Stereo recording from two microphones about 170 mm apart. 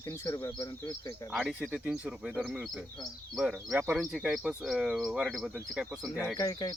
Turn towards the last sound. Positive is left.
turn(degrees=25)  # may be behind; listen again after turning